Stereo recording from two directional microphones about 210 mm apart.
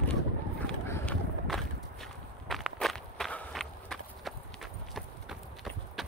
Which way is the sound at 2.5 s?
Centre (ahead or behind).